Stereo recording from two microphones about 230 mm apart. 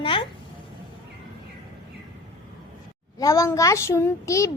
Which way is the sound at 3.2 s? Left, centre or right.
Centre.